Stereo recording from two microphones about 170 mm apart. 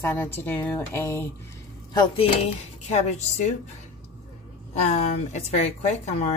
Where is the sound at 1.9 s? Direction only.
35° left (ahead or behind).